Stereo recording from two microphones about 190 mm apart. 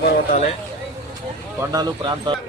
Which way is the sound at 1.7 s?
20° right (ahead or behind).